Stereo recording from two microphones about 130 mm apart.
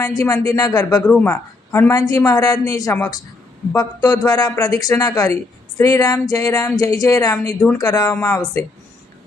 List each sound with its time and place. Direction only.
0.2 s a woman's voice: 25° left (ahead or behind)
1.0 s a woman's voice: 15° left (ahead or behind)